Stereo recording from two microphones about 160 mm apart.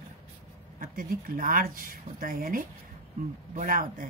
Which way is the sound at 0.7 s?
60° right (ahead or behind).